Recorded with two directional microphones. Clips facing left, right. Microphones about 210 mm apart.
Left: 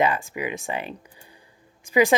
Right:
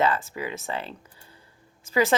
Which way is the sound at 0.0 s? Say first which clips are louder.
Left 2 dB; 15° left (ahead or behind).